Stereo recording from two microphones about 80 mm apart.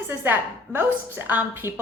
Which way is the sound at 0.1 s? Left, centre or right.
Right.